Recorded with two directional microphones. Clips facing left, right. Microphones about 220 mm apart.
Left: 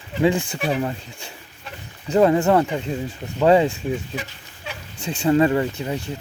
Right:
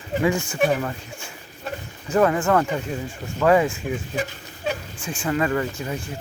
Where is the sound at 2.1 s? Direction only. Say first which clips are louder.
Left 3 dB; 25° left (ahead or behind).